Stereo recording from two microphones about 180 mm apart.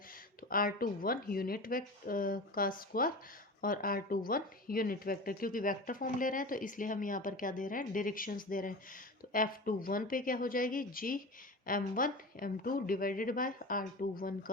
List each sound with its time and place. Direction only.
0.5 s speech: 55° left (ahead or behind)